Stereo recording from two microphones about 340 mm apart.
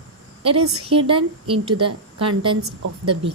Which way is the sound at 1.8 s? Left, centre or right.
Right.